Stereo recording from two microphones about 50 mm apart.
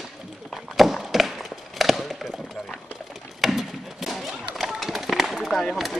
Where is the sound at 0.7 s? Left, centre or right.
Centre.